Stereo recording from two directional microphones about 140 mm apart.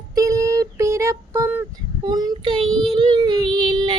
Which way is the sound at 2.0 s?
30° right (ahead or behind).